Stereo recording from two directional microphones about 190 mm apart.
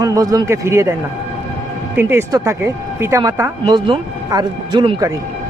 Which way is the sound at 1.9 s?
15° right (ahead or behind).